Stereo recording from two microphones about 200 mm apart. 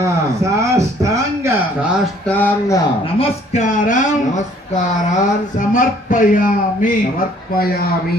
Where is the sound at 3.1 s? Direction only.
30° left (ahead or behind).